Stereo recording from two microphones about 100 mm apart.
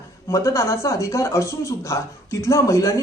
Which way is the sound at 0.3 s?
30° left (ahead or behind).